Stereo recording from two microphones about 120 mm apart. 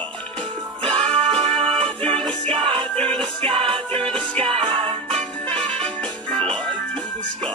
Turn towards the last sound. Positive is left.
turn(degrees=5)  # may be behind; listen again after turning